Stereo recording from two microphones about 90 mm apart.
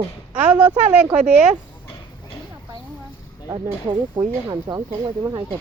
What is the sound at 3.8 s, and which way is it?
Speech, 55° right (ahead or behind).